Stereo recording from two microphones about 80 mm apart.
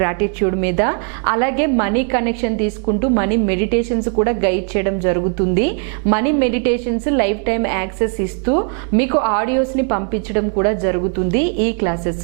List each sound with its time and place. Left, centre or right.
0.0 s a woman's voice: centre